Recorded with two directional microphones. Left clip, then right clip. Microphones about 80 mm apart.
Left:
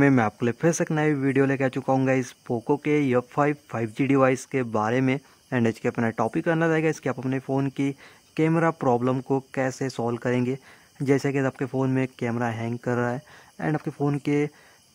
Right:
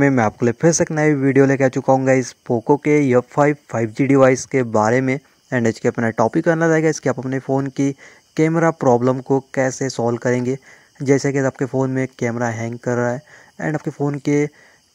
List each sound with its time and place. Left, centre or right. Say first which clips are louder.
0.0 s speech: right 5 dB; right
2.4 s speech: right 8 dB; right
2.7 s speech: right 8 dB; right